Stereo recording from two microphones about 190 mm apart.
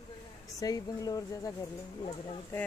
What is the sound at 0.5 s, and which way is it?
Speech, 20° left (ahead or behind).